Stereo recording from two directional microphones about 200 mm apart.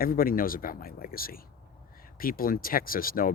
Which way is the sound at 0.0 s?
45° left (ahead or behind).